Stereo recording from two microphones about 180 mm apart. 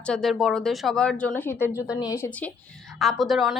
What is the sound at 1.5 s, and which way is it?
Speech, 10° right (ahead or behind).